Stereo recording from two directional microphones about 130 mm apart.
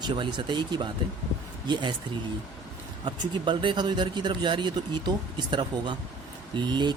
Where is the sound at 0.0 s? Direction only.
35° right (ahead or behind).